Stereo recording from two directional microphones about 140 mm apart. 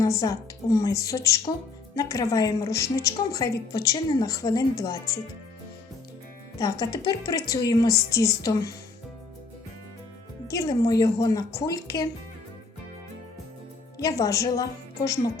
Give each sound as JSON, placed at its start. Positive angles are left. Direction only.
{"t": 0.0, "sound": "a woman's voice", "side_deg": 25}
{"t": 6.6, "sound": "a woman's voice", "side_deg": 25}
{"t": 10.5, "sound": "a woman's voice", "side_deg": 25}
{"t": 14.0, "sound": "a woman's voice", "side_deg": 25}